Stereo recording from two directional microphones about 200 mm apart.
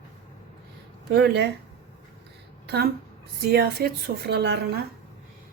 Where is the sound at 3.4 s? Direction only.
50° right (ahead or behind).